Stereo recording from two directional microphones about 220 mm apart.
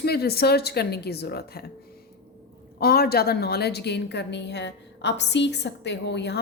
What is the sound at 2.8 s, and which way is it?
A woman's voice, 45° left (ahead or behind).